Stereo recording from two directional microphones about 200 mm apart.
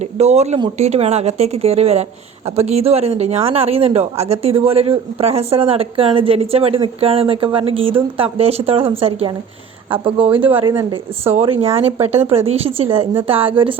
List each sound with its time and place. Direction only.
0.0 s speech: 35° right (ahead or behind)